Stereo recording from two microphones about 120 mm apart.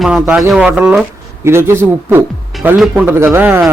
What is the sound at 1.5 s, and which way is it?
Speech, 20° right (ahead or behind).